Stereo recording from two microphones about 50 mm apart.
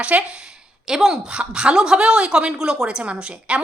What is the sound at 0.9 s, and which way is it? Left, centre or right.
A woman's voice, centre.